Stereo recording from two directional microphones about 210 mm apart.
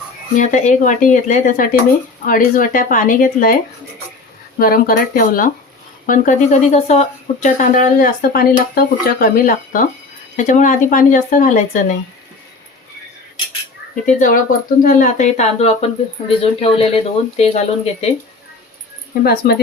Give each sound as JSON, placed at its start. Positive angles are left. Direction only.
{"t": 0.3, "sound": "speech", "side_deg": 35}
{"t": 13.9, "sound": "speech", "side_deg": 40}
{"t": 19.2, "sound": "speech", "side_deg": 50}